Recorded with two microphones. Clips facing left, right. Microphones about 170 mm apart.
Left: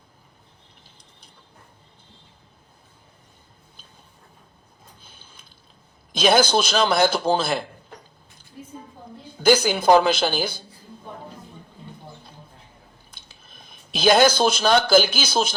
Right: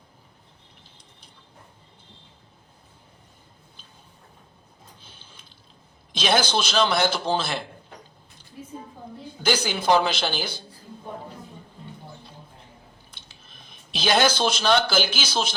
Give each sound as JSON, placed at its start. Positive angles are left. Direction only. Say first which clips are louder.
{"t": 6.1, "sound": "a man's voice", "louder": "left 5 dB", "side_deg": 45}
{"t": 9.4, "sound": "a man's voice", "louder": "left 7 dB", "side_deg": 45}
{"t": 13.1, "sound": "a sound", "louder": "even", "side_deg": 45}